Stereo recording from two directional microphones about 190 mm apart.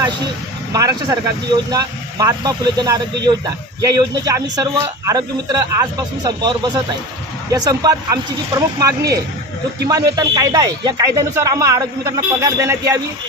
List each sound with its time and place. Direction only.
0.7 s speech: 20° right (ahead or behind)